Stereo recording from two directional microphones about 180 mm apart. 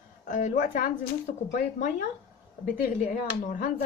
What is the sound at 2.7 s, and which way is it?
Speech, 50° left (ahead or behind).